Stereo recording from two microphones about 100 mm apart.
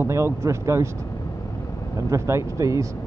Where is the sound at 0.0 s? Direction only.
30° right (ahead or behind).